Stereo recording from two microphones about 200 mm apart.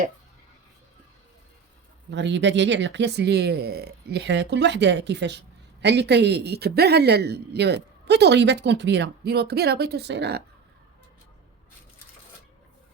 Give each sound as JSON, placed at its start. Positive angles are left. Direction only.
{"t": 2.0, "sound": "a woman's voice", "side_deg": -60}